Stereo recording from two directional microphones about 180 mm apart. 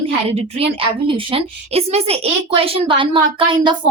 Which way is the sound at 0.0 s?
35° right (ahead or behind).